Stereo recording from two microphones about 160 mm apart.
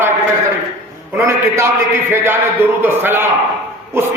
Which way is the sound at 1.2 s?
15° right (ahead or behind).